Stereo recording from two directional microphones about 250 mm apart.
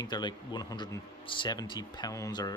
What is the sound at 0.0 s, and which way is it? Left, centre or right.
Speech, centre.